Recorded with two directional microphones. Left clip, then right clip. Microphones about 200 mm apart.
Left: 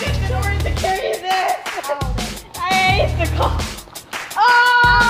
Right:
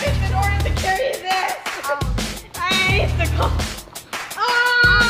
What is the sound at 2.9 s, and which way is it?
Music, 35° right (ahead or behind).